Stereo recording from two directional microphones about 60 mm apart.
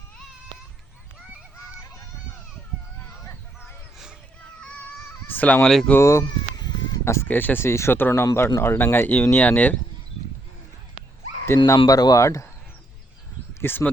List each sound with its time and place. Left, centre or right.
5.3 s speech: left
5.6 s speech: centre
6.0 s speech: left
7.3 s speech: left
11.4 s speech: left
11.9 s speech: left
13.5 s a sound: left